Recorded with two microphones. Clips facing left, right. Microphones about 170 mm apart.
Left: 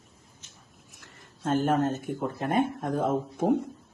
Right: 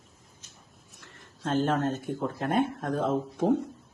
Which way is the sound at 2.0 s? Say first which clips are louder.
Even; 15° left (ahead or behind).